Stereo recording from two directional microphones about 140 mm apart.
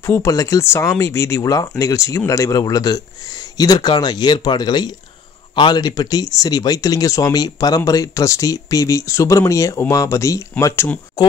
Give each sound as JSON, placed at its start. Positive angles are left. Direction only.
{"t": 0.0, "sound": "speech", "side_deg": 20}
{"t": 11.2, "sound": "speech", "side_deg": 30}